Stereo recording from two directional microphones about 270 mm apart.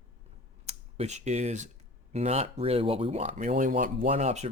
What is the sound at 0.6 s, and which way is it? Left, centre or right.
Speech, right.